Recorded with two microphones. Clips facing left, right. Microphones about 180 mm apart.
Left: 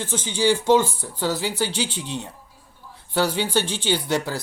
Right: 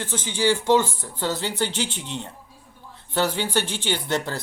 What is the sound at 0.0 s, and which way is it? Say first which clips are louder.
Speech: left 1 dB; 15° left (ahead or behind).